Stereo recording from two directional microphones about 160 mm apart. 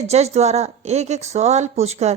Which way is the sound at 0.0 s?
40° right (ahead or behind).